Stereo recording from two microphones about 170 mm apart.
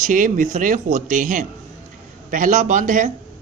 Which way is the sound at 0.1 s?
50° right (ahead or behind).